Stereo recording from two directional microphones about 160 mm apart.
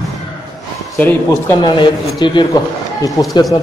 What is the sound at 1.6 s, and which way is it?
Speech, 30° left (ahead or behind).